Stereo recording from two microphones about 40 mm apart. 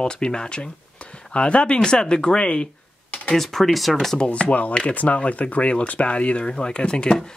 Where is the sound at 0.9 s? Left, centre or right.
Left.